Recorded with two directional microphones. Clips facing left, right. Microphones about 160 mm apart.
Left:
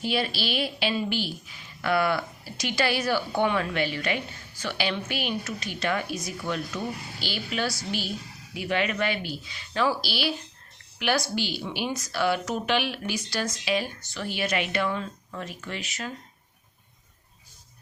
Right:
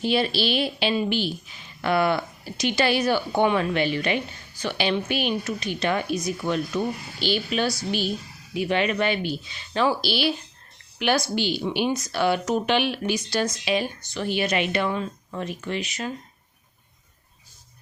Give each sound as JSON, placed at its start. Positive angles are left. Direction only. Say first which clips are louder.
{"t": 0.0, "sound": "a woman's voice", "louder": "right 5 dB", "side_deg": -25}